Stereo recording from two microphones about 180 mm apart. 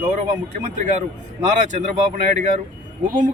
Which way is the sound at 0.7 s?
45° right (ahead or behind).